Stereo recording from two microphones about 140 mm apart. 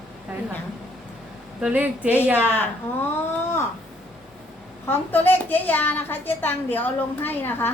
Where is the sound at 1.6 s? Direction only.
10° right (ahead or behind).